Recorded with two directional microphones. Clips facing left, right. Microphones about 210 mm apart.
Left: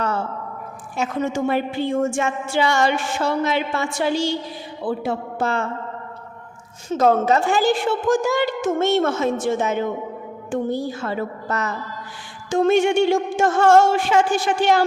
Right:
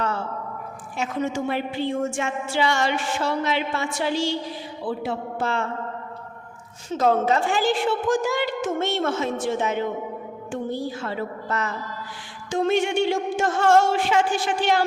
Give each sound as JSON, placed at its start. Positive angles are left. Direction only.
{"t": 0.9, "sound": "a woman's voice", "side_deg": 45}
{"t": 6.9, "sound": "a woman's voice", "side_deg": 45}